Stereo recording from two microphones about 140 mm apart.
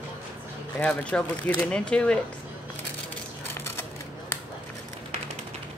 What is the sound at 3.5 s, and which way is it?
Crushing, 20° left (ahead or behind).